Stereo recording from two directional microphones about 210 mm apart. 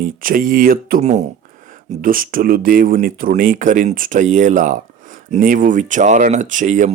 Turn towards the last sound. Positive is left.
turn(degrees=-35)  # may be behind; listen again after turning